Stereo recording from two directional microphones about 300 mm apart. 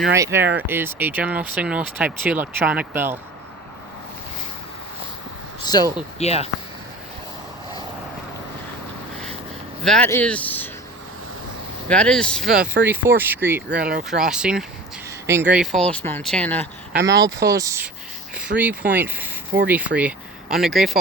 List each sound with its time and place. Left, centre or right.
0.2 s speech: centre
5.6 s speech: centre
9.8 s speech: centre
11.9 s speech: centre
13.7 s speech: right
14.1 s speech: centre
16.9 s speech: right
17.2 s speech: centre